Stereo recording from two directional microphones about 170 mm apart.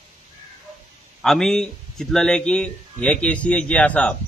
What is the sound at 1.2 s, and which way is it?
Speech, centre (ahead or behind).